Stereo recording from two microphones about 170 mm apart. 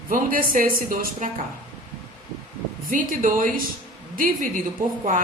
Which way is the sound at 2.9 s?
50° right (ahead or behind).